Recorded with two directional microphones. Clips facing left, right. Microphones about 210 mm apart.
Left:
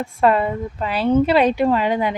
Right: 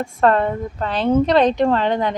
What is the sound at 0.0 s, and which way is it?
Speech, 10° left (ahead or behind).